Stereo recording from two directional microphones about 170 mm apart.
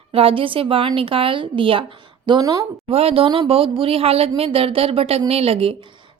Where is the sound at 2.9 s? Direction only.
35° right (ahead or behind).